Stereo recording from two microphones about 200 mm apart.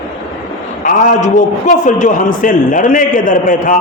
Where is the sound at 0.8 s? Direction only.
40° left (ahead or behind).